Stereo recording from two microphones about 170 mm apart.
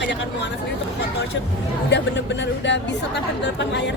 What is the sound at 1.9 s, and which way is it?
Speech, 90° left.